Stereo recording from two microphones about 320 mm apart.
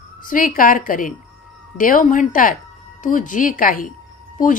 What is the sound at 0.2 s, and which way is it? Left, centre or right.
Speech, left.